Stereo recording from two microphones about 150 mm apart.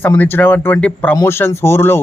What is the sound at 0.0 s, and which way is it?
Speech, 15° left (ahead or behind).